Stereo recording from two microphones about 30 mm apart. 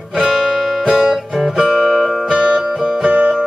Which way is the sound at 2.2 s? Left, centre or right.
Right.